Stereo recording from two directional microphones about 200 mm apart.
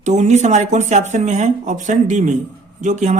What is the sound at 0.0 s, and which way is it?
Speech, 35° right (ahead or behind).